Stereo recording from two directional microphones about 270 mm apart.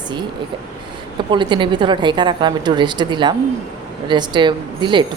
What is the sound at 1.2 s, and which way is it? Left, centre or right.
A woman's voice, centre.